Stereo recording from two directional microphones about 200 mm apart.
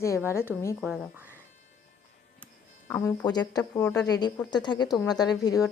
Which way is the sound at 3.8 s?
5° left (ahead or behind).